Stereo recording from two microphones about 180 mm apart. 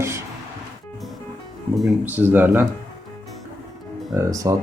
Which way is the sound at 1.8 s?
5° right (ahead or behind).